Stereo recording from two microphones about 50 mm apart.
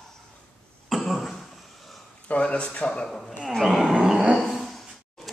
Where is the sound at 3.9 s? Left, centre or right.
Centre.